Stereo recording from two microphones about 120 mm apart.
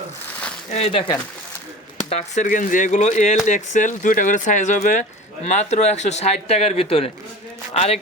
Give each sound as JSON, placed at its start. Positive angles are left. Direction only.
{"t": 0.7, "sound": "speech", "side_deg": 55}
{"t": 2.0, "sound": "speech", "side_deg": 70}
{"t": 3.4, "sound": "speech", "side_deg": 90}
{"t": 5.5, "sound": "a man's voice", "side_deg": 75}